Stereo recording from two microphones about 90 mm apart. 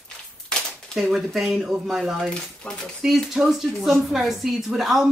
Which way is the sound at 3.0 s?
5° right (ahead or behind).